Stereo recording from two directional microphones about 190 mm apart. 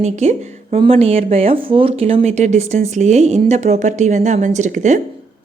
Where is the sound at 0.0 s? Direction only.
35° right (ahead or behind).